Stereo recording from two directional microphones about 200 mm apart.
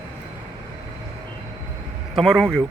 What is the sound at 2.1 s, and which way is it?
Speech, centre (ahead or behind).